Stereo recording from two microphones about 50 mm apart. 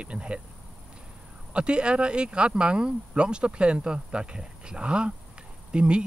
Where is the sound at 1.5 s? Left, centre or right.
Right.